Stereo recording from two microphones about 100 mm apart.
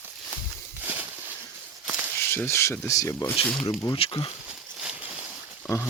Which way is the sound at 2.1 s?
25° left (ahead or behind).